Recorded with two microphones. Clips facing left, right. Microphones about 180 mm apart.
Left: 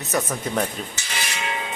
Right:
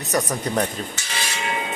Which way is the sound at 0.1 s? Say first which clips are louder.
Right 2 dB; centre (ahead or behind).